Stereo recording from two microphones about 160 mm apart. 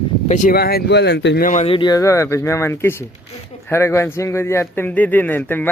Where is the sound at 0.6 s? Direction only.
75° left (ahead or behind).